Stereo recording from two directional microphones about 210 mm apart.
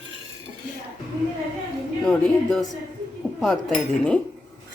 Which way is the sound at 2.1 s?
Centre (ahead or behind).